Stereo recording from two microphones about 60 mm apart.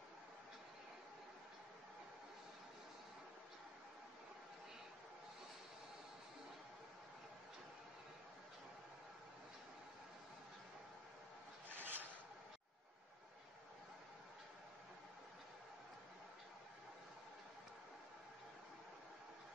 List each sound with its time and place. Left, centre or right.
11.8 s rub: right